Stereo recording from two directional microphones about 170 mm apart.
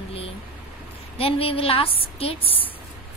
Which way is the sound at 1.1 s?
35° left (ahead or behind).